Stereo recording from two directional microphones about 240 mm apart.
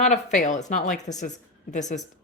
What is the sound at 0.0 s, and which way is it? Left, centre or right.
Speech, left.